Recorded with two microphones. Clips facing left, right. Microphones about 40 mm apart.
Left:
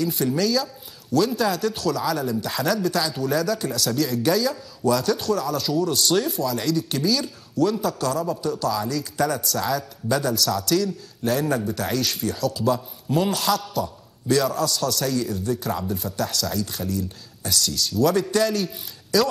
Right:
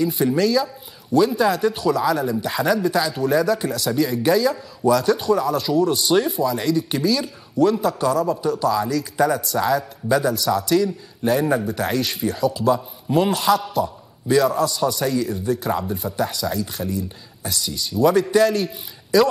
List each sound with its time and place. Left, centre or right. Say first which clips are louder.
0.0 s speech: right 4 dB; centre